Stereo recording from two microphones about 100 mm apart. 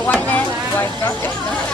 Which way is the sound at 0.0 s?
20° left (ahead or behind).